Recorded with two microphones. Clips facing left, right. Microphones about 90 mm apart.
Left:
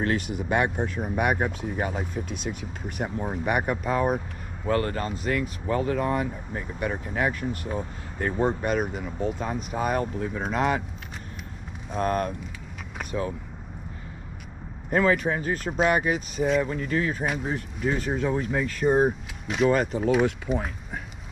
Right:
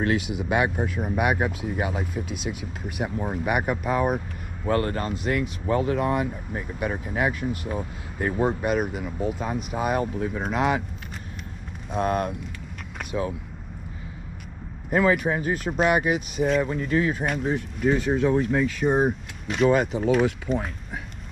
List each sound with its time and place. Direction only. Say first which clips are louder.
0.1 s speech: right 1 dB; 5° right (ahead or behind)
4.6 s speech: right 1 dB; 30° right (ahead or behind)
5.9 s speech: right 2 dB; 5° right (ahead or behind)
11.9 s speech: right 1 dB; 10° right (ahead or behind)
14.9 s speech: right 1 dB; 5° right (ahead or behind)